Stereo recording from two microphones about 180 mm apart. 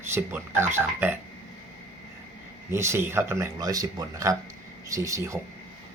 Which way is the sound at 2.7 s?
15° right (ahead or behind).